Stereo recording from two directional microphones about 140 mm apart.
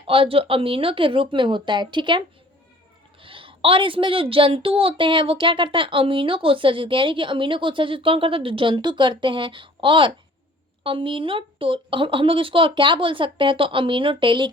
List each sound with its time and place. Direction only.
0.1 s a woman's voice: 40° right (ahead or behind)